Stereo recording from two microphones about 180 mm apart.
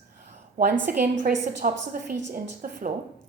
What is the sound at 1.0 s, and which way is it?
A woman's voice, 55° right (ahead or behind).